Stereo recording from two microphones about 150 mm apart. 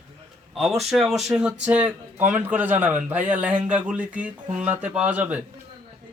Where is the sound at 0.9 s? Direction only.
Centre (ahead or behind).